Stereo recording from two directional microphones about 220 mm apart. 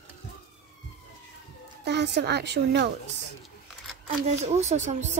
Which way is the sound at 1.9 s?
50° right (ahead or behind).